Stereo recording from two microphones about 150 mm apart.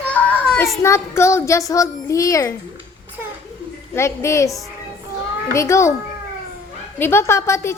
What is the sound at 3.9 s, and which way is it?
Speech, 20° left (ahead or behind).